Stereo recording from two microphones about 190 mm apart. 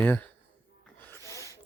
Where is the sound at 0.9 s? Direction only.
10° left (ahead or behind).